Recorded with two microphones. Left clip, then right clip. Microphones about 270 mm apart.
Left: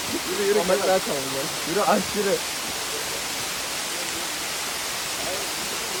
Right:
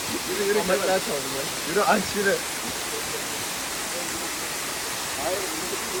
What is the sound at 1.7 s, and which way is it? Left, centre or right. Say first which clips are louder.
Speech: even; left.